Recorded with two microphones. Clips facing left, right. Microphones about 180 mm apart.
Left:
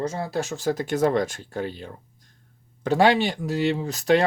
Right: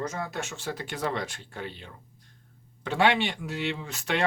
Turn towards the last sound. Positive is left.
turn(degrees=40)  # may be behind; listen again after turning